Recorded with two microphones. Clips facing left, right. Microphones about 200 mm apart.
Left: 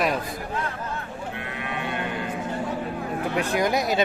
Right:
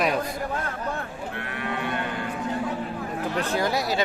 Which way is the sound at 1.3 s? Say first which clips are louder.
Right 3 dB; 20° left (ahead or behind).